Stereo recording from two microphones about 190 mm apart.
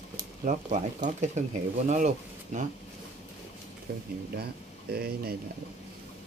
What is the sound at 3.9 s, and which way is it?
Speech, 55° right (ahead or behind).